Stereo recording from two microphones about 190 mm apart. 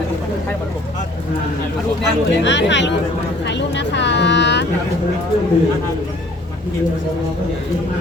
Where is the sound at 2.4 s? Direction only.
70° left (ahead or behind).